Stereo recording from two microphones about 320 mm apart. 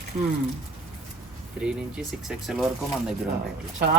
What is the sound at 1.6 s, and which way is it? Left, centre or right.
Speech, centre.